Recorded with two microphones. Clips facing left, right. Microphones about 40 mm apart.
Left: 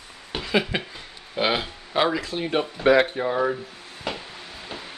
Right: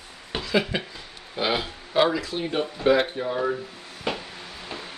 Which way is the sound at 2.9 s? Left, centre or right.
Left.